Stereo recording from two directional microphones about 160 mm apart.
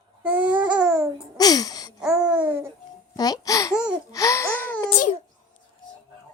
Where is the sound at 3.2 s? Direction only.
20° left (ahead or behind).